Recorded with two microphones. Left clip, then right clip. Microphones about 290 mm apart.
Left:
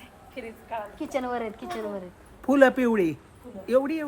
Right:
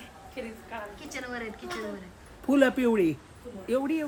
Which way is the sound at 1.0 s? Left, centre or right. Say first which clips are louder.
Left 11 dB; centre.